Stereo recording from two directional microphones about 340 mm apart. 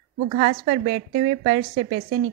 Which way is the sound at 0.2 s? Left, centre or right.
Right.